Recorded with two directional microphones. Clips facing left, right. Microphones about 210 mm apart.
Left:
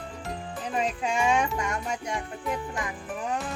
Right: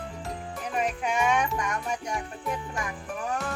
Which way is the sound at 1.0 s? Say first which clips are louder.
Left 1 dB; 30° left (ahead or behind).